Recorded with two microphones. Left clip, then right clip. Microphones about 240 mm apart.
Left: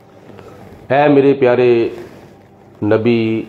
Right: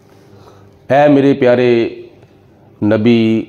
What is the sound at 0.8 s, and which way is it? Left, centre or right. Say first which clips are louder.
Speech: right 1 dB; right.